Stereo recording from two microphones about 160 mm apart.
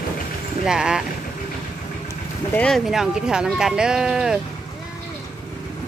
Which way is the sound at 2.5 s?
5° left (ahead or behind).